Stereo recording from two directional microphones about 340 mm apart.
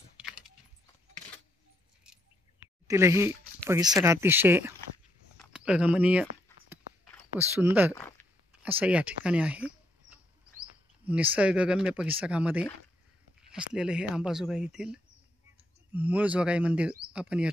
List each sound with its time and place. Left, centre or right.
2.9 s speech: centre
7.3 s speech: centre
7.9 s a sound: centre
8.6 s speech: centre
11.3 s speech: centre